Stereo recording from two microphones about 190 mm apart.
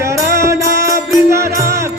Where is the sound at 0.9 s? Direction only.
15° right (ahead or behind).